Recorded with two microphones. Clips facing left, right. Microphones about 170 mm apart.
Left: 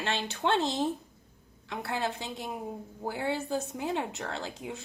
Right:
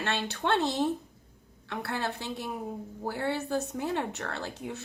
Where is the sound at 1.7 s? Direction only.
65° right (ahead or behind).